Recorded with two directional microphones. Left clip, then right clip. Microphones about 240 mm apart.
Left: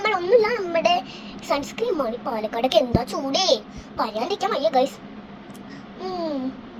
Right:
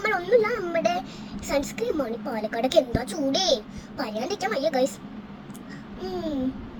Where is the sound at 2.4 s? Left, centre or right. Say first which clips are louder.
Left 2 dB; centre.